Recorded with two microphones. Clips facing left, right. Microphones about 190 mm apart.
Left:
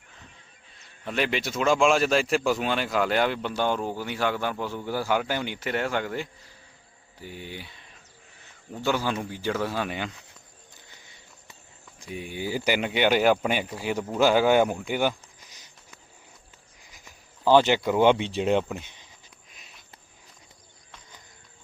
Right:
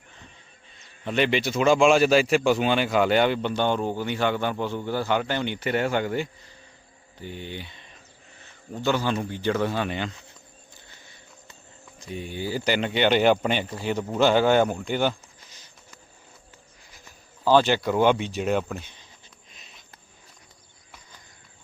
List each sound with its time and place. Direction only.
1.0 s speech: centre (ahead or behind)
10.8 s walk: 15° left (ahead or behind)
11.9 s speech: 10° left (ahead or behind)
16.9 s speech: 15° left (ahead or behind)
19.5 s a sound: 10° left (ahead or behind)